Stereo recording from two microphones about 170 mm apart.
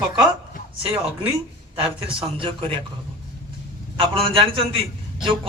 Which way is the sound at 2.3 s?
30° right (ahead or behind).